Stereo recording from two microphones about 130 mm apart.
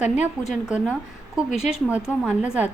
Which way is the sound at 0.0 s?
10° right (ahead or behind).